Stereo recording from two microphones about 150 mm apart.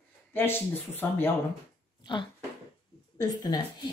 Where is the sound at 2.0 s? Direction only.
30° left (ahead or behind).